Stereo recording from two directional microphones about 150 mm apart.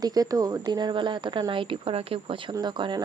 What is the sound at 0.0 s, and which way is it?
Speech, 25° right (ahead or behind).